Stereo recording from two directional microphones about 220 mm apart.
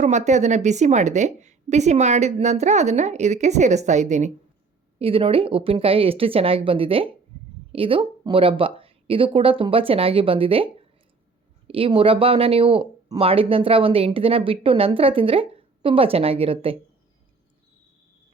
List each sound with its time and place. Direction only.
0.0 s a woman's voice: 30° right (ahead or behind)
11.7 s speech: 25° right (ahead or behind)